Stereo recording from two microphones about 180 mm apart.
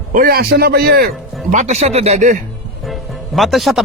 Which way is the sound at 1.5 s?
40° right (ahead or behind).